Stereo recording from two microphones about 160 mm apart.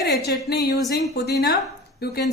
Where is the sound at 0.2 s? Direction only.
90° left.